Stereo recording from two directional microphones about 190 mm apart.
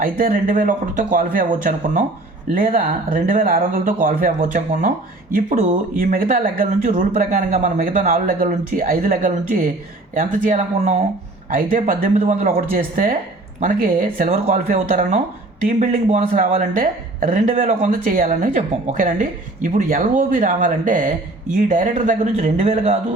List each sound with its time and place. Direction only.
0.0 s a woman's voice: 45° right (ahead or behind)